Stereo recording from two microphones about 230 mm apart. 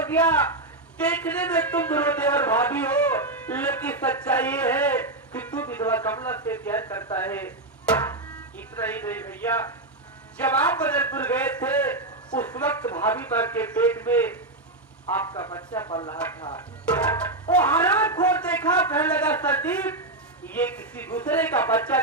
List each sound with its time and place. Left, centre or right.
0.1 s a man's voice: centre
17.5 s a man's voice: centre
20.5 s a man's voice: centre